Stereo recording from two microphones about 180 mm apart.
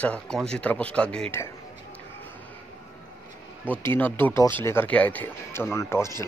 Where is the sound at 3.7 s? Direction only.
10° left (ahead or behind).